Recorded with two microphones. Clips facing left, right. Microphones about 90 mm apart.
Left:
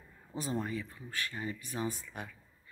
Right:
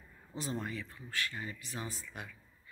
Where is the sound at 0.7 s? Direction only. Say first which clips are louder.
Left 3 dB; 20° left (ahead or behind).